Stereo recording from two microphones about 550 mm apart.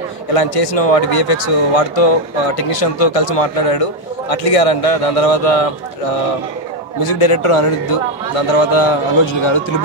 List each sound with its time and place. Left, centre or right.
0.3 s a man's voice: left
7.1 s a man's voice: left